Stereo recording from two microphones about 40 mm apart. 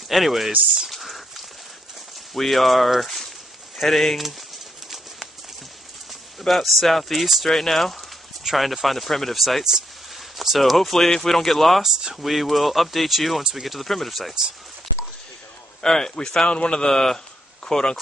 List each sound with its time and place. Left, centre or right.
0.1 s speech: centre
0.8 s a sound: centre
2.3 s speech: centre
6.4 s speech: centre
13.4 s speech: centre
13.7 s speech: centre
15.8 s a man's voice: centre
16.4 s a man's voice: left